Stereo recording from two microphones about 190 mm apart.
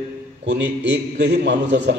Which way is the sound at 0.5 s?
70° right (ahead or behind).